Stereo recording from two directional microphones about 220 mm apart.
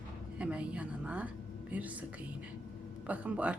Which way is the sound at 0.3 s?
5° right (ahead or behind).